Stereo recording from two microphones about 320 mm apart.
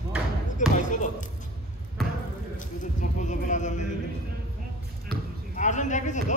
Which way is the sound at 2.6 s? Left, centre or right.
Left.